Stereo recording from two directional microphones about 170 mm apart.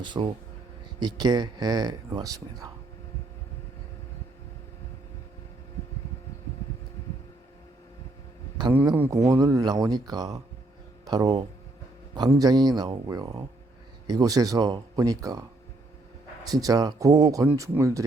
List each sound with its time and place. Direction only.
0.0 s speech: 25° right (ahead or behind)
9.0 s speech: 20° right (ahead or behind)
16.6 s speech: 20° right (ahead or behind)